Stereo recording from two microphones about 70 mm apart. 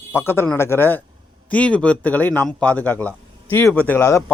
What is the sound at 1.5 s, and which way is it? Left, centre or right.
Speech, centre.